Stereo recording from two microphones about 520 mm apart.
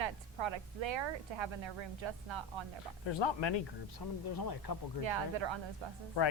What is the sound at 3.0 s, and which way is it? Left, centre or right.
Speech, left.